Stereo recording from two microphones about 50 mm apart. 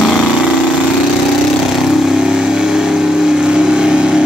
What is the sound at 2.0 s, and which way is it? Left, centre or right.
Vehicle, centre.